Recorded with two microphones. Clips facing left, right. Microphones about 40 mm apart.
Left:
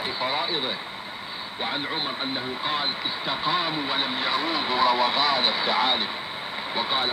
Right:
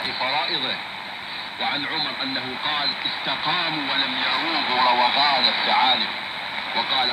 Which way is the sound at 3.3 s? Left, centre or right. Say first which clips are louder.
Right 1 dB; right.